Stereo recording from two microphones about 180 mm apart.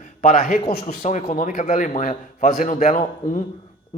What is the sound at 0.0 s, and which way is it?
A man's voice, 40° left (ahead or behind).